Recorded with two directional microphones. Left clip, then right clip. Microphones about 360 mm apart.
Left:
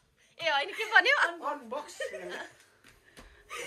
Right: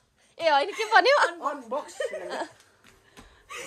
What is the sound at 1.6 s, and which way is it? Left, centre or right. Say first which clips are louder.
Speech: right 6 dB; right.